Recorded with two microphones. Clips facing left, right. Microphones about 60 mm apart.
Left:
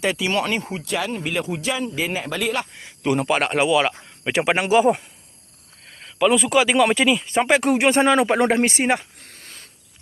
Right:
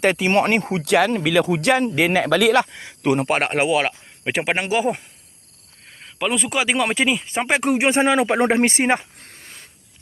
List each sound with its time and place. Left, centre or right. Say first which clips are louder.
0.0 s speech: right 4 dB; right
3.4 s speech: left 1 dB; right
4.5 s speech: left 6 dB; centre; by 8.6 s right
8.6 s a sound: right 2 dB; right